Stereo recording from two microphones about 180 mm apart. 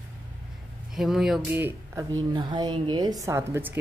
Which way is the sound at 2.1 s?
25° right (ahead or behind).